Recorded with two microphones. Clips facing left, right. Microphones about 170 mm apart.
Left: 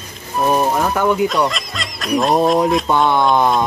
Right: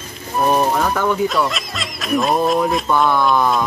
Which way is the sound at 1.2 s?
Centre (ahead or behind).